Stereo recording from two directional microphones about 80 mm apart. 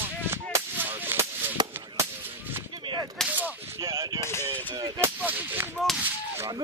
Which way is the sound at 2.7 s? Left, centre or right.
Right.